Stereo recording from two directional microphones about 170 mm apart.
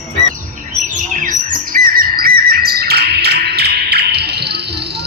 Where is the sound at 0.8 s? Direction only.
50° right (ahead or behind).